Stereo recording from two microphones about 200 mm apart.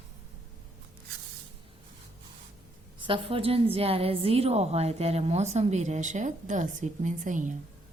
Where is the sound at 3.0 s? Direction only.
25° right (ahead or behind).